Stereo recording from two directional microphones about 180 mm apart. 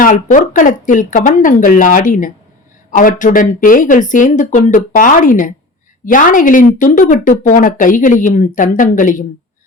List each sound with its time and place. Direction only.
0.0 s a woman's voice: 45° left (ahead or behind)